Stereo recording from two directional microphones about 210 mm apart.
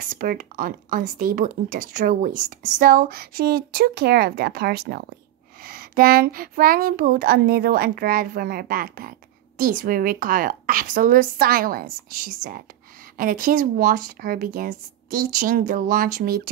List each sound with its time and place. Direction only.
0.0 s speech: 40° right (ahead or behind)